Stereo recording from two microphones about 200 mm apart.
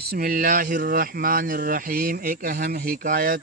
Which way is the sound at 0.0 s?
50° right (ahead or behind).